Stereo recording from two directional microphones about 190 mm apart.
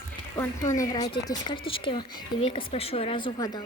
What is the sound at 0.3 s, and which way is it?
Speech, 15° left (ahead or behind).